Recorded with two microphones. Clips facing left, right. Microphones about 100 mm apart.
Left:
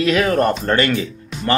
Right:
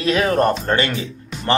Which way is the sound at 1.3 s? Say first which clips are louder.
Left 4 dB; centre (ahead or behind).